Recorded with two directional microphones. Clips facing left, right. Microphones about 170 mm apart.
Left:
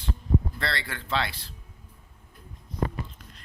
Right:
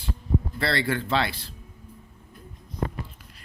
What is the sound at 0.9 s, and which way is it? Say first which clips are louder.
Speech: right 5 dB; 45° right (ahead or behind).